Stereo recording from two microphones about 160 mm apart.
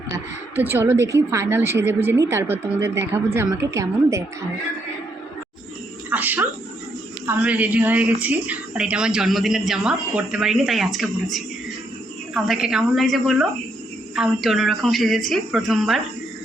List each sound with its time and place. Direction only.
0.5 s a woman's voice: 15° right (ahead or behind)
6.1 s a woman's voice: 10° right (ahead or behind)